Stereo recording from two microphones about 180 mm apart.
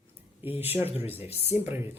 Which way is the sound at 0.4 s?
10° right (ahead or behind).